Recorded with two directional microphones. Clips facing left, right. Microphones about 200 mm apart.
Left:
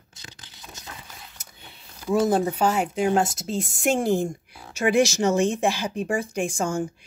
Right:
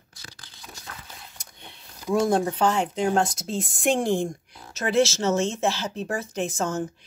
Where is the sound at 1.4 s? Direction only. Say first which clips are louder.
Right 1 dB; 5° left (ahead or behind).